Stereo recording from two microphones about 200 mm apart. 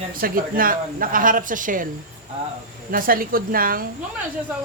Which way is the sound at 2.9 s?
45° right (ahead or behind).